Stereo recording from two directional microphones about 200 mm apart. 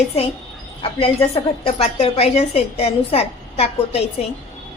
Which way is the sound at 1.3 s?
30° left (ahead or behind).